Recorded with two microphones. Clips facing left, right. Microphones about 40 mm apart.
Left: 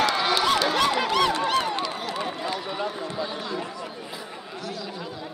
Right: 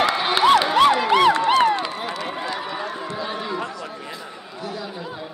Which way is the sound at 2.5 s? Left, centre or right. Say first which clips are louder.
Right 3 dB; right.